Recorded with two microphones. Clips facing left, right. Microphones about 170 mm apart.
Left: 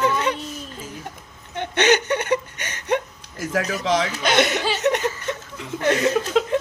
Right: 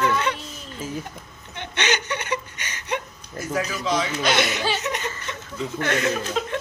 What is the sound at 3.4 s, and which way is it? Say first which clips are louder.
Speech: left 2 dB; 75° left (ahead or behind).